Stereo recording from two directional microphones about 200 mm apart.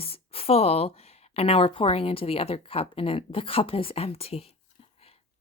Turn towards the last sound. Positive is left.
turn(degrees=30)  # may be behind; listen again after turning